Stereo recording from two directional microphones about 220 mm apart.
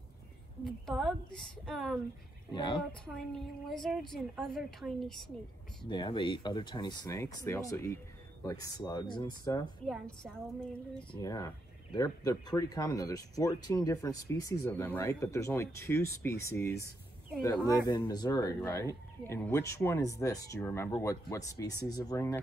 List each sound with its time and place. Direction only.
0.7 s a woman's voice: centre (ahead or behind)
2.5 s speech: 20° left (ahead or behind)
2.9 s a woman's voice: centre (ahead or behind)
5.9 s speech: 20° left (ahead or behind)
9.8 s a woman's voice: centre (ahead or behind)
11.1 s speech: 20° left (ahead or behind)